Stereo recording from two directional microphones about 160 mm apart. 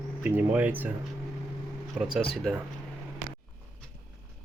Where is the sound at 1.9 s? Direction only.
5° right (ahead or behind).